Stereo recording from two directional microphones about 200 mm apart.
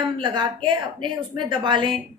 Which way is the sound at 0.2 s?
25° right (ahead or behind).